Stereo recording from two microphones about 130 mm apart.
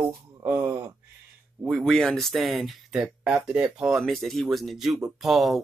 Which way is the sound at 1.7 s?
Centre (ahead or behind).